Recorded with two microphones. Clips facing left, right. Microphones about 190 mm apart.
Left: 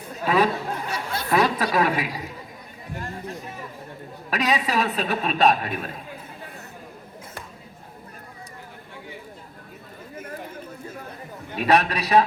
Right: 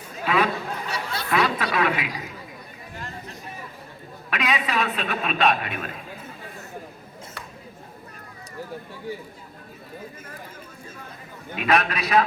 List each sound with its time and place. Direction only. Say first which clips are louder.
0.3 s speech: left 2 dB; 35° left (ahead or behind)
0.9 s chatter: left 2 dB; 50° left (ahead or behind)
1.4 s a woman's voice: left 2 dB; 35° left (ahead or behind)
4.3 s a man's voice: left 2 dB; 40° left (ahead or behind)
11.5 s a man's voice: left 2 dB; 35° left (ahead or behind)